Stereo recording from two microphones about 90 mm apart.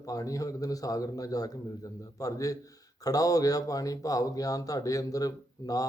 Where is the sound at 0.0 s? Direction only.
40° left (ahead or behind).